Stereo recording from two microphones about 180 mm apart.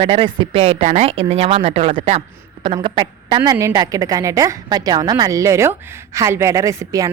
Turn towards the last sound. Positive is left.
turn(degrees=-20)  # may be behind; listen again after turning